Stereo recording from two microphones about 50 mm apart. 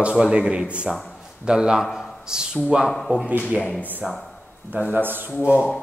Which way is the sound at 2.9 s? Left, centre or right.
Centre.